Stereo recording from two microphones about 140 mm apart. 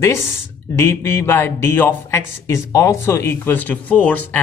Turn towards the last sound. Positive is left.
turn(degrees=10)  # may be behind; listen again after turning